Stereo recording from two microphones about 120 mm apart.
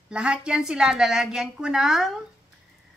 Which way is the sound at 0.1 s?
10° right (ahead or behind).